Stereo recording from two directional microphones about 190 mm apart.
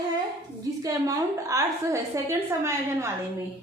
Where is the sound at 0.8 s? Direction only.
20° right (ahead or behind).